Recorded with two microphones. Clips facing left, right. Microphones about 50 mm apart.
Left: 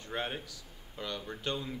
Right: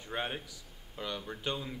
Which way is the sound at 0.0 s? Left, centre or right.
Centre.